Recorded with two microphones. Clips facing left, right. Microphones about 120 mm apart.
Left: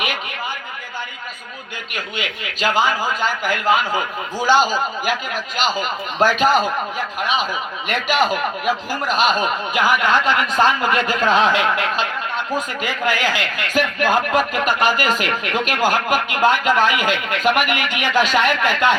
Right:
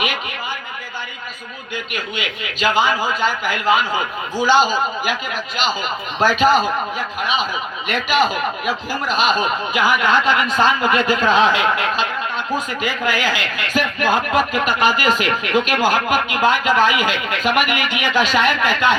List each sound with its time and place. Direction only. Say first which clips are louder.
1.9 s a man's voice: left 1 dB; 40° left (ahead or behind)